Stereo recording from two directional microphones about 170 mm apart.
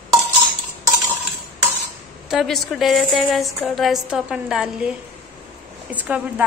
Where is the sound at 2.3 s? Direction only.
Centre (ahead or behind).